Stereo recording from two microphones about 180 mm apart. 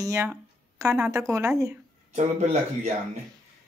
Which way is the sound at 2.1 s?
35° right (ahead or behind).